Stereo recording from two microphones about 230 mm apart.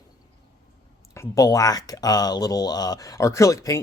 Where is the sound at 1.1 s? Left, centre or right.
Centre.